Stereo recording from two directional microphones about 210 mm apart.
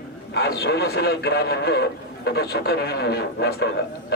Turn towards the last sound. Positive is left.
turn(degrees=50)  # may be behind; listen again after turning